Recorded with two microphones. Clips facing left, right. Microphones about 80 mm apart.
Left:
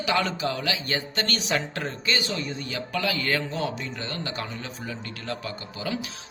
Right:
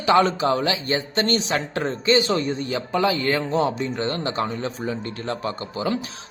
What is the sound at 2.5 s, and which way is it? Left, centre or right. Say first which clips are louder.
A man's voice: right 6 dB; right.